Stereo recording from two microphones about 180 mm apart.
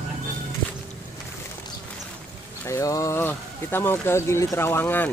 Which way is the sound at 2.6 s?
15° left (ahead or behind).